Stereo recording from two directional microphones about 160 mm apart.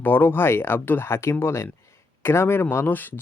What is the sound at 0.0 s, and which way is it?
Speech, 15° left (ahead or behind).